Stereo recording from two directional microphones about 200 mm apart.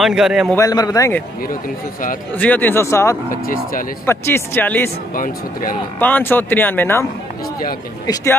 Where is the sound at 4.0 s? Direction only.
10° left (ahead or behind).